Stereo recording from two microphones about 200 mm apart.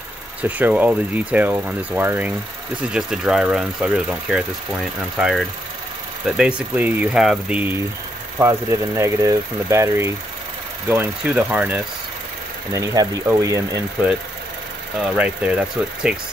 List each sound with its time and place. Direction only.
0.4 s speech: 5° right (ahead or behind)